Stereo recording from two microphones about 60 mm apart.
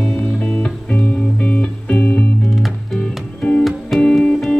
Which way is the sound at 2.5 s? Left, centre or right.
Centre.